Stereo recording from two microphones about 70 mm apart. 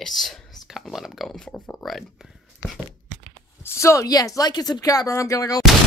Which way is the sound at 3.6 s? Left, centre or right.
Left.